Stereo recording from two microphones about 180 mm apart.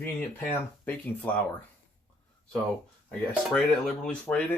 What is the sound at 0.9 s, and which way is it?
Speech, 10° left (ahead or behind).